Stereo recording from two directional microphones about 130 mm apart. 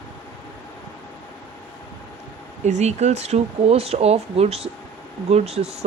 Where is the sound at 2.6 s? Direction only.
60° right (ahead or behind).